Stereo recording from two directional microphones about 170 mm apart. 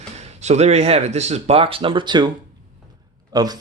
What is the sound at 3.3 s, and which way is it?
Speech, 25° right (ahead or behind).